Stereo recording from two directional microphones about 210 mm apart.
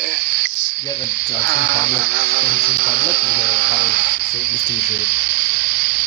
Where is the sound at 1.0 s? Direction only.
50° right (ahead or behind).